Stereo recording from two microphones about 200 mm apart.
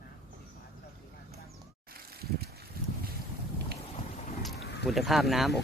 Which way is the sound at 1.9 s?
50° right (ahead or behind).